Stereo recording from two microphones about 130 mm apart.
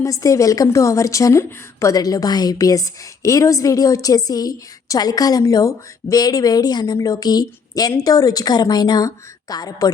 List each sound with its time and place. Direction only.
0.0 s a woman's voice: 25° left (ahead or behind)